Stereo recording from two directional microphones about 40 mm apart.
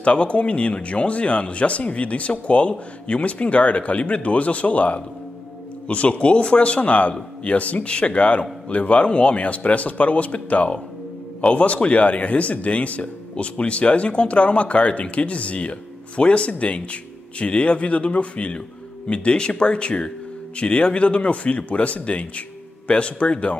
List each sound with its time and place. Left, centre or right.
0.0 s speech: left